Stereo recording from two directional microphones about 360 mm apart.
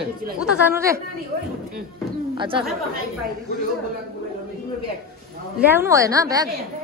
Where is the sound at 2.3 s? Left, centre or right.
Centre.